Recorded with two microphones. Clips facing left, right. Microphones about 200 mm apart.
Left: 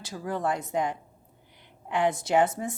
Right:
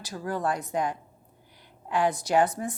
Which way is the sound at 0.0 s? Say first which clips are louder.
Even; 25° left (ahead or behind).